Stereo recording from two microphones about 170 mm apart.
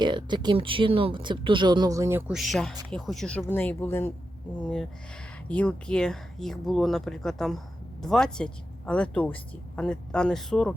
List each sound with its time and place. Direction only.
0.0 s speech: 25° right (ahead or behind)
2.3 s speech: centre (ahead or behind)